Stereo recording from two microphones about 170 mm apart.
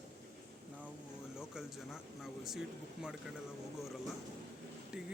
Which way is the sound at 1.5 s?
Centre (ahead or behind).